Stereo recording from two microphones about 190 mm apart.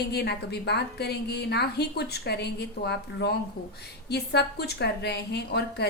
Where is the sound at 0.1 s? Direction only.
60° left (ahead or behind).